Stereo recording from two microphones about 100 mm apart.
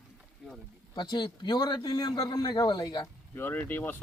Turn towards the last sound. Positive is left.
turn(degrees=20)  # may be behind; listen again after turning